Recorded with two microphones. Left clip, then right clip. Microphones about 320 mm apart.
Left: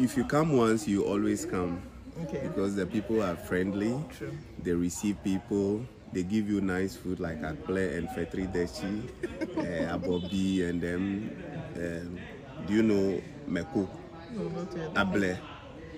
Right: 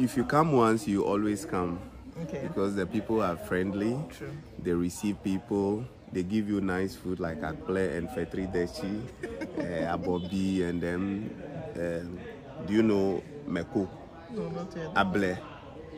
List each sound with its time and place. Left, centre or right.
0.0 s speech: centre
14.9 s speech: centre